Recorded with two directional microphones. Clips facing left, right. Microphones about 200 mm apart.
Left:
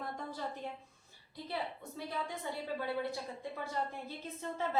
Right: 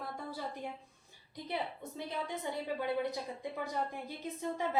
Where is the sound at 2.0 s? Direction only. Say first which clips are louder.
Right 1 dB; 20° right (ahead or behind).